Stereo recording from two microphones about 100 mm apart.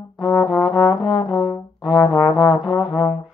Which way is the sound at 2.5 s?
Centre (ahead or behind).